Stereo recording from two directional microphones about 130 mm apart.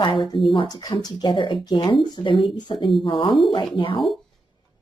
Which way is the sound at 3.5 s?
40° left (ahead or behind).